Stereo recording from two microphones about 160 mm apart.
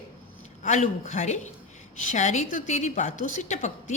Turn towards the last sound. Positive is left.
turn(degrees=45)  # may be behind; listen again after turning